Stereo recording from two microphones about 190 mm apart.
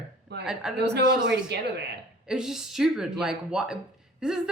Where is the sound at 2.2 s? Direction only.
5° right (ahead or behind).